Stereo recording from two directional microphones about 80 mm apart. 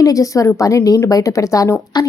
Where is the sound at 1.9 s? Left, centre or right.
Left.